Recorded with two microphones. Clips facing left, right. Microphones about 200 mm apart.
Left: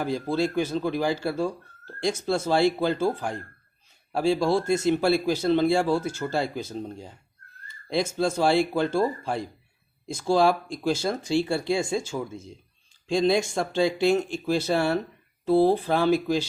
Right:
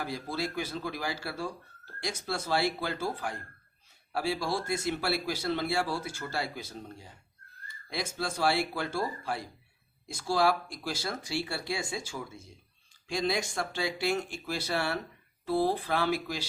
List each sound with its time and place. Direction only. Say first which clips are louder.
0.0 s speech: left 9 dB; 25° left (ahead or behind)